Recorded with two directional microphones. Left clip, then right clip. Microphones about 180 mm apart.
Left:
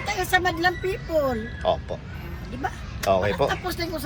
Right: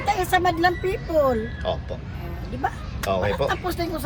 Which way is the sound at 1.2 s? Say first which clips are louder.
Right 2 dB; 5° right (ahead or behind).